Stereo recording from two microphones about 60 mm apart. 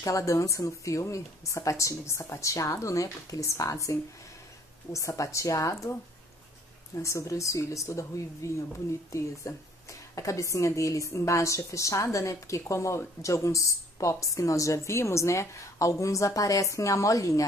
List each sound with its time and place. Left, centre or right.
0.0 s a woman's voice: left
7.0 s a woman's voice: left